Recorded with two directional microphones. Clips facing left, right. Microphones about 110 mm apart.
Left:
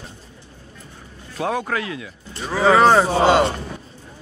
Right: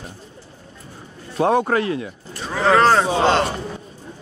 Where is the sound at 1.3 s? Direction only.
35° right (ahead or behind).